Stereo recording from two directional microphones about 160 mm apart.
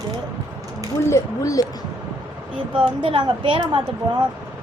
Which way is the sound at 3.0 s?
30° right (ahead or behind).